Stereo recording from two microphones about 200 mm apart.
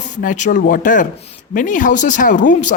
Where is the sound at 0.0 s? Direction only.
40° left (ahead or behind).